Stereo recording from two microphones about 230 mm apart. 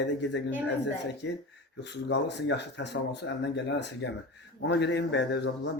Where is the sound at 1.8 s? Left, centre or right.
Left.